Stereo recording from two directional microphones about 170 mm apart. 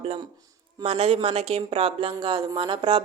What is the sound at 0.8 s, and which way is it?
Speech, 35° right (ahead or behind).